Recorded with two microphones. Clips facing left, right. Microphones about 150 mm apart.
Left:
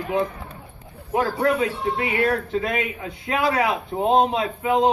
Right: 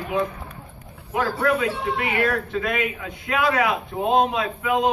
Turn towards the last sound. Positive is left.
turn(degrees=30)  # may be behind; listen again after turning